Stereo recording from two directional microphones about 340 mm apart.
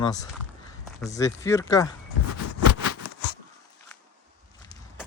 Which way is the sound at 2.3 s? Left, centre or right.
Left.